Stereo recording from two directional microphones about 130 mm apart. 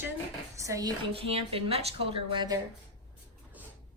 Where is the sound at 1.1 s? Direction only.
50° right (ahead or behind).